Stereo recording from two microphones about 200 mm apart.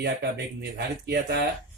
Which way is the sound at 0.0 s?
55° right (ahead or behind).